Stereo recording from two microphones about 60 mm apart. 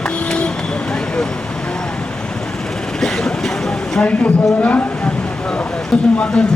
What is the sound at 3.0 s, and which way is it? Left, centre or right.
Vehicle, centre.